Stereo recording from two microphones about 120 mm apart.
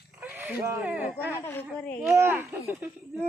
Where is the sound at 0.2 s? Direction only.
15° right (ahead or behind).